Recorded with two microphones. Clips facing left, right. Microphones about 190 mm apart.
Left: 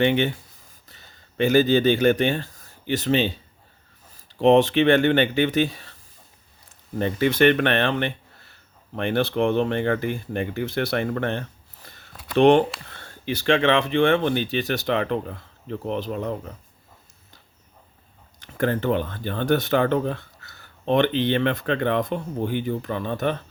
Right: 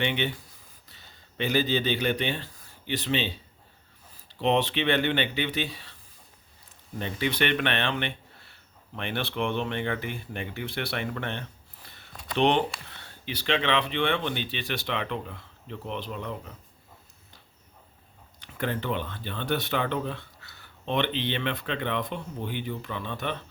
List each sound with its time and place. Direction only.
0.0 s speech: 45° left (ahead or behind)
1.4 s speech: 45° left (ahead or behind)
4.4 s speech: 45° left (ahead or behind)
7.0 s speech: 45° left (ahead or behind)
18.3 s speech: 45° left (ahead or behind)